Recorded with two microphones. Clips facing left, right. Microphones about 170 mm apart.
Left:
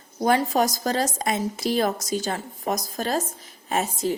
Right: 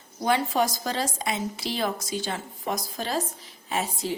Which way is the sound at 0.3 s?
40° left (ahead or behind).